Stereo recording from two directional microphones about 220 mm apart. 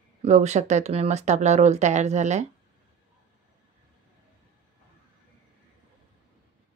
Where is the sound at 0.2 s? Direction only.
30° right (ahead or behind).